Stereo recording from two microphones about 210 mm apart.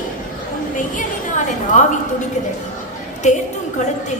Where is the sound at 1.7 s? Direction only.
35° left (ahead or behind).